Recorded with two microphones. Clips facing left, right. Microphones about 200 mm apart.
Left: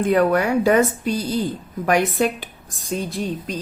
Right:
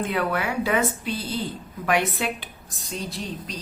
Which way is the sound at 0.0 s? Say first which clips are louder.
Left 8 dB; 45° left (ahead or behind).